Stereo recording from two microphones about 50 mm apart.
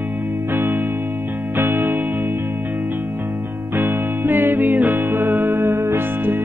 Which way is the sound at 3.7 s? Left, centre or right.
Right.